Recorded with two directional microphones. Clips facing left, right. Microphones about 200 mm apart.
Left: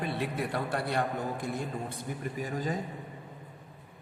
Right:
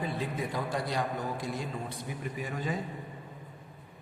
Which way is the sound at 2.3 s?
40° left (ahead or behind).